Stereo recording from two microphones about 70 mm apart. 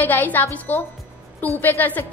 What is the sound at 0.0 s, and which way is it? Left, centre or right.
A woman's voice, left.